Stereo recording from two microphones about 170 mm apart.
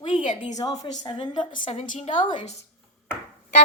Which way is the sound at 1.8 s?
50° left (ahead or behind).